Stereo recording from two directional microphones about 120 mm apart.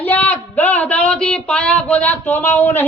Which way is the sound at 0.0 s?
15° left (ahead or behind).